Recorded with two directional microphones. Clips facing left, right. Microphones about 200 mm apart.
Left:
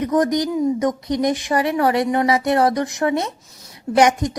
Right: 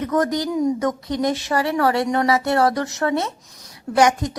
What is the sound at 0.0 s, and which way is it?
Speech, 15° left (ahead or behind).